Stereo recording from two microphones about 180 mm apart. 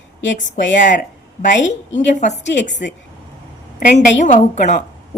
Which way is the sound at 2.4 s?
80° left.